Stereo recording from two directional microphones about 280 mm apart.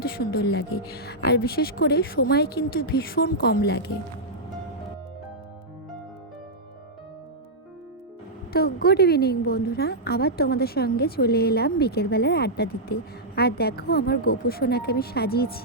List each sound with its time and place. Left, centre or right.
0.2 s a woman's voice: left
8.5 s a woman's voice: left